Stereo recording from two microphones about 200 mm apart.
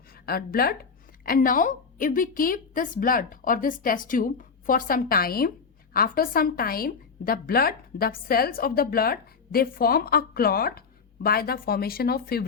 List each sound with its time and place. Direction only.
0.1 s a woman's voice: 50° left (ahead or behind)